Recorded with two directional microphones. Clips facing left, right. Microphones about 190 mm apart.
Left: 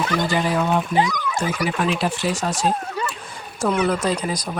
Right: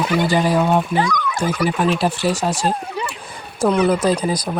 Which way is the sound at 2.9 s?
10° right (ahead or behind).